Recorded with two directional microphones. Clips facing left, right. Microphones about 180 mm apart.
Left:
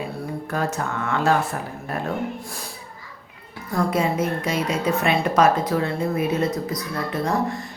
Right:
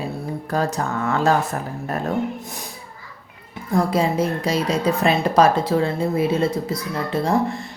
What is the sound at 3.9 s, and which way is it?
Speech, 30° right (ahead or behind).